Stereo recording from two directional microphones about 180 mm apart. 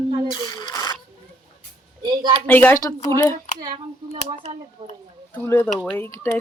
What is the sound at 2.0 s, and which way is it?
Speech, 25° right (ahead or behind).